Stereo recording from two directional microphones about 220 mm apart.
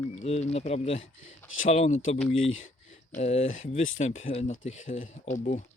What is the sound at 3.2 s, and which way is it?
Speech, 30° left (ahead or behind).